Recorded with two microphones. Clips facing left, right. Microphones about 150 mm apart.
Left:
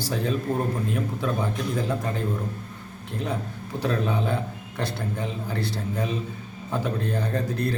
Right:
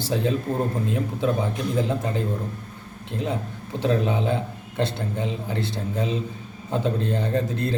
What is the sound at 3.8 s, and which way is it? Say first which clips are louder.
Speech: right 3 dB; 20° right (ahead or behind).